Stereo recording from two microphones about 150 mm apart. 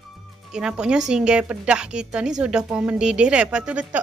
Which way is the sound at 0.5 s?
5° right (ahead or behind).